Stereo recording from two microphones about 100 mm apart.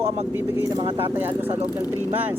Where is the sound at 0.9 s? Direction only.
20° right (ahead or behind).